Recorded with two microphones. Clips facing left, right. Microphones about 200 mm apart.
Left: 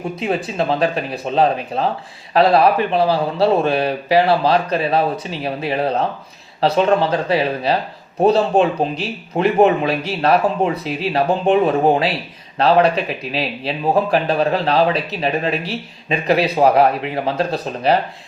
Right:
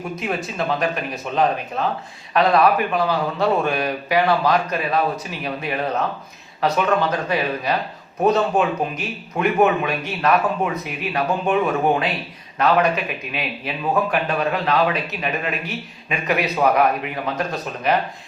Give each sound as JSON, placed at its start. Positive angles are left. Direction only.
{"t": 0.0, "sound": "speech", "side_deg": 30}